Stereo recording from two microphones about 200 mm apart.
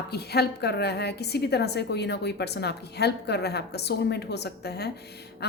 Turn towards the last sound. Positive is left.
turn(degrees=55)  # may be behind; listen again after turning